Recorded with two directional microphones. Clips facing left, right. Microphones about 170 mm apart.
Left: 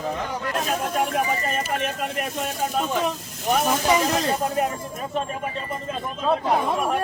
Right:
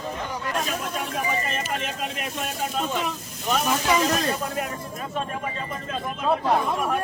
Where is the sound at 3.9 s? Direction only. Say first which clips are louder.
Left 1 dB; 30° left (ahead or behind).